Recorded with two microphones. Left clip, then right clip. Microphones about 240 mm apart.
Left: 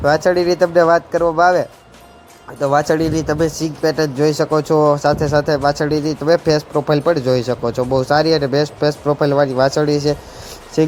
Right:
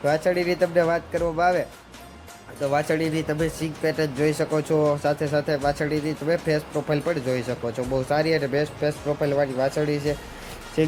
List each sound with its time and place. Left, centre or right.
0.3 s speech: left
2.6 s speech: centre